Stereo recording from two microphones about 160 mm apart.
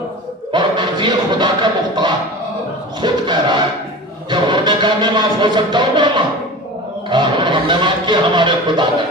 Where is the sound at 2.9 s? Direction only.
25° right (ahead or behind).